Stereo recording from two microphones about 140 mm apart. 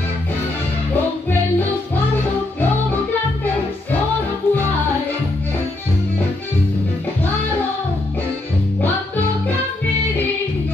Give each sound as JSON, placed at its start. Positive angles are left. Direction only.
{"t": 4.4, "sound": "music", "side_deg": 15}